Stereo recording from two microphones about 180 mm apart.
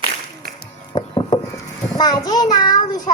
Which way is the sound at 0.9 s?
25° left (ahead or behind).